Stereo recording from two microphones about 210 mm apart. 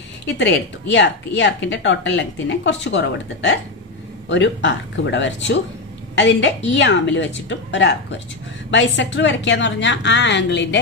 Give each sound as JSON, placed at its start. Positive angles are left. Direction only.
{"t": 0.4, "sound": "speech", "side_deg": 55}